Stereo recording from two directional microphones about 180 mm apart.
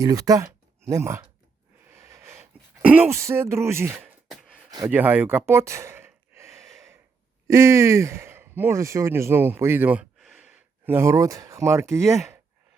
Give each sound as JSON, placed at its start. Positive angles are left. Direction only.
{"t": 0.0, "sound": "speech", "side_deg": -20}
{"t": 1.9, "sound": "a sound", "side_deg": -15}
{"t": 2.8, "sound": "speech", "side_deg": -10}
{"t": 5.5, "sound": "sigh", "side_deg": -15}
{"t": 7.4, "sound": "speech", "side_deg": -15}